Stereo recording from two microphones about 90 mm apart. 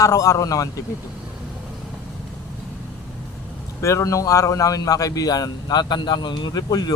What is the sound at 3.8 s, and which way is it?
A man's voice, 30° left (ahead or behind).